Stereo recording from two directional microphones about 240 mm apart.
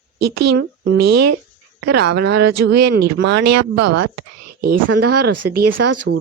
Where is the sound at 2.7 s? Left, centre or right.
Right.